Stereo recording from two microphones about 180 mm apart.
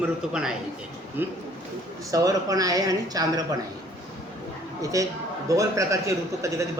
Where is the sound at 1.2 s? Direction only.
10° right (ahead or behind).